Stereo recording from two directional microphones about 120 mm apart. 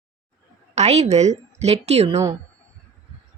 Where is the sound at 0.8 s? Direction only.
65° right (ahead or behind).